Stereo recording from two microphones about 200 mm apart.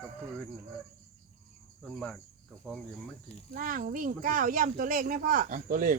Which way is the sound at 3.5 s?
45° right (ahead or behind).